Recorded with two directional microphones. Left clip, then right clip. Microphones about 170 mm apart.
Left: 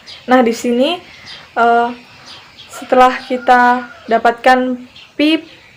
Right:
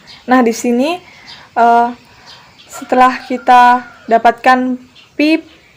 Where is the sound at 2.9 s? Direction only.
40° right (ahead or behind).